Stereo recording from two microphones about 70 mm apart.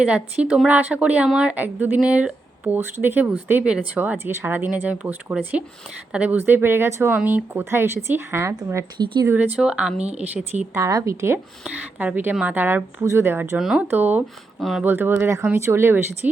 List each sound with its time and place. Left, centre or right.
0.0 s speech: centre
4.2 s speech: right
6.3 s speech: right
9.6 s speech: centre
10.8 s a woman's voice: right
11.7 s speech: right
12.3 s speech: centre
12.5 s speech: right
13.6 s speech: centre
13.9 s speech: right